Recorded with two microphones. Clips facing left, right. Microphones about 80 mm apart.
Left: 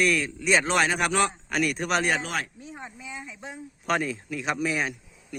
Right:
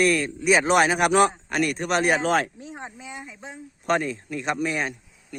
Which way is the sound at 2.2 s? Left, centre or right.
Right.